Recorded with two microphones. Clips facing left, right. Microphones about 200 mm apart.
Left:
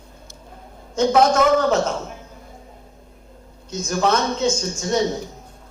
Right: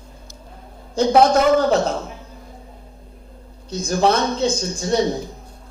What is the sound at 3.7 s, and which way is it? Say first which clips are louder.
Speech: right 2 dB; 35° right (ahead or behind).